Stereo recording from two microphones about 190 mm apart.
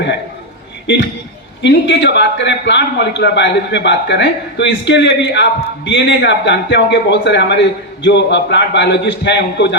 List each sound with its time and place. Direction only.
1.6 s a man's voice: 65° left (ahead or behind)